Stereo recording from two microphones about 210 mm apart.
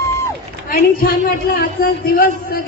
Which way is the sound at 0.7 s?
45° left (ahead or behind).